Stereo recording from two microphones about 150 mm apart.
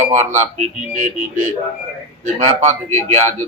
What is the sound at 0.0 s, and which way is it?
A man's voice, 50° right (ahead or behind).